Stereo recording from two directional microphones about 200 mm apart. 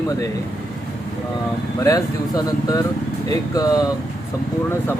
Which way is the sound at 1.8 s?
15° left (ahead or behind).